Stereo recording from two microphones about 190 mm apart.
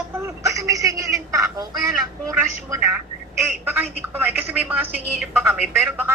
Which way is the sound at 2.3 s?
15° right (ahead or behind).